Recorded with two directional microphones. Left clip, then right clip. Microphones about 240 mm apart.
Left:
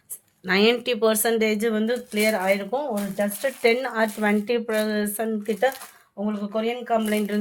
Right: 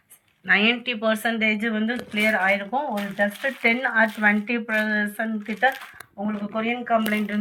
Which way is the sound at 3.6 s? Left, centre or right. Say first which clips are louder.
Right 1 dB; left.